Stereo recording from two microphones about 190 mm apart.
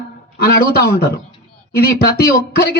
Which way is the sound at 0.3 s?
55° left (ahead or behind).